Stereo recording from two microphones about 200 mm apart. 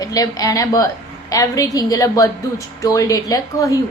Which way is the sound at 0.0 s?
20° left (ahead or behind).